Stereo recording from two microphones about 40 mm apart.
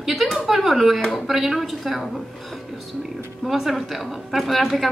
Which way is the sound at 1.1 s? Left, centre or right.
Centre.